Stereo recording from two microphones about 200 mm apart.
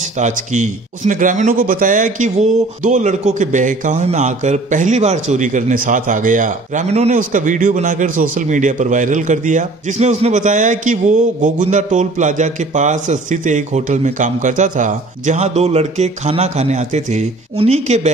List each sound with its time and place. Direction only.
0.2 s a man's voice: 35° right (ahead or behind)